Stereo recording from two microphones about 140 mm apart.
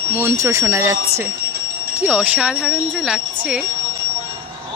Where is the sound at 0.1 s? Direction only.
15° right (ahead or behind).